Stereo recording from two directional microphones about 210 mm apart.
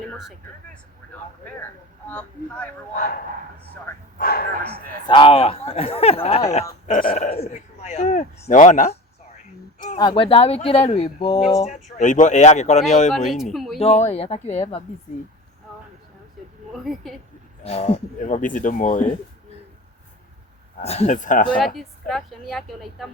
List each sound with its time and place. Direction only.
0.0 s speech: centre (ahead or behind)
2.0 s speech: 5° left (ahead or behind)
2.9 s a man's voice: 45° left (ahead or behind)
4.2 s a man's voice: 45° left (ahead or behind)
5.0 s speech: 25° left (ahead or behind); by 7.3 s 45° left (ahead or behind)
7.3 s speech: 30° left (ahead or behind)
9.7 s a sound: 30° left (ahead or behind)
10.0 s speech: 25° left (ahead or behind)
13.3 s a woman's voice: centre (ahead or behind)
13.7 s speech: 30° left (ahead or behind)
16.7 s a woman's voice: centre (ahead or behind)
17.6 s speech: 30° left (ahead or behind)
20.8 s speech: 30° left (ahead or behind)
21.8 s a woman's voice: centre (ahead or behind)